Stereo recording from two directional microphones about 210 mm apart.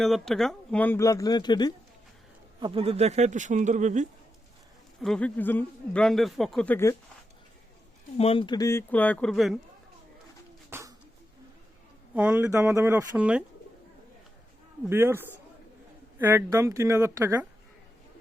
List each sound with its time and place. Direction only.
0.0 s speech: centre (ahead or behind); by 1.7 s 20° left (ahead or behind)
2.6 s speech: 25° right (ahead or behind)
4.9 s a man's voice: centre (ahead or behind)
8.2 s speech: 25° left (ahead or behind); by 9.6 s centre (ahead or behind)
10.7 s a sound: 10° right (ahead or behind)
12.1 s speech: 5° right (ahead or behind)
14.8 s speech: 10° right (ahead or behind)